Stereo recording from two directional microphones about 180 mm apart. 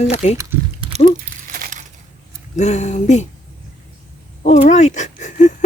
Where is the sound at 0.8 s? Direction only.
35° right (ahead or behind).